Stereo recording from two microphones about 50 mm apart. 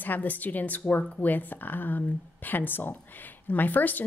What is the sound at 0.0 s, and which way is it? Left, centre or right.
Speech, left.